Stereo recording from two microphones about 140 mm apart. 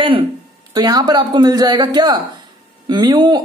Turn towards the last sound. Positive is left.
turn(degrees=-30)  # may be behind; listen again after turning